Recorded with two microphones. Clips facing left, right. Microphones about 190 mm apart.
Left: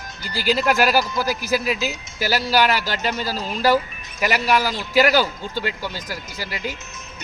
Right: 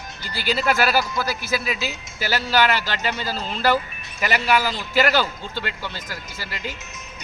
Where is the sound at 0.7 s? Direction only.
10° left (ahead or behind).